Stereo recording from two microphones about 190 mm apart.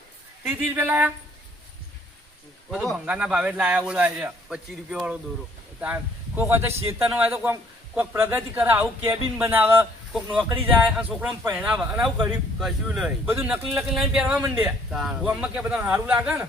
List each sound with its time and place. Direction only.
0.4 s a man's voice: 10° right (ahead or behind)
2.6 s a man's voice: centre (ahead or behind)